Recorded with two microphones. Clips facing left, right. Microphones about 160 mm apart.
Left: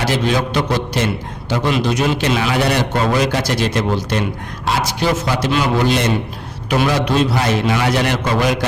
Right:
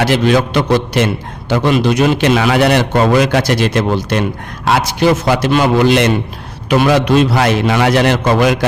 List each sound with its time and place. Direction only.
0.1 s a man's voice: 70° right (ahead or behind)
5.8 s a man's voice: 75° right (ahead or behind); by 8.4 s 60° right (ahead or behind)